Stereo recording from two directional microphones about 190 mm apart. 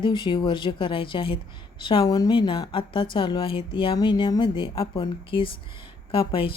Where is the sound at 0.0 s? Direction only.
25° left (ahead or behind).